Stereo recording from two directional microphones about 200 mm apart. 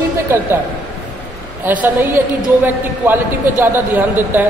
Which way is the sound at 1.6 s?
10° right (ahead or behind).